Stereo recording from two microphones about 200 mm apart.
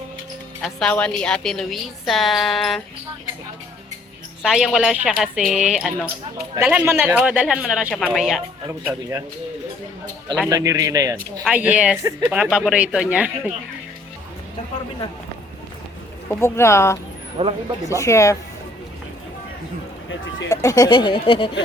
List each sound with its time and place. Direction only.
0.6 s a woman's voice: 5° left (ahead or behind)
4.4 s a woman's voice: centre (ahead or behind)
8.8 s speech: 15° right (ahead or behind)
10.5 s speech: 15° right (ahead or behind)
11.4 s a woman's voice: 5° right (ahead or behind)
16.3 s speech: 15° left (ahead or behind)
17.4 s speech: 30° right (ahead or behind)
17.8 s speech: 15° left (ahead or behind)
20.5 s speech: 15° left (ahead or behind)